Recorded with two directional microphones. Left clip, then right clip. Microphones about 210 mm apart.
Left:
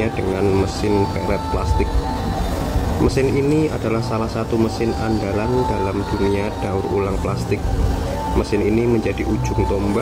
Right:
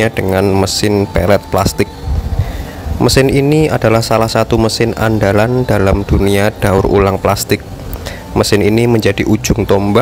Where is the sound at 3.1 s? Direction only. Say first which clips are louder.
Right 9 dB; 50° right (ahead or behind).